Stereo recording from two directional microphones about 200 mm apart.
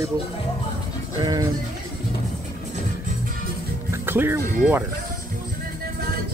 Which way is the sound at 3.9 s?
10° right (ahead or behind).